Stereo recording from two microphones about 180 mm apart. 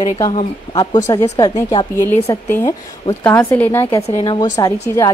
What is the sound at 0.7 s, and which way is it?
A woman's voice, 20° left (ahead or behind).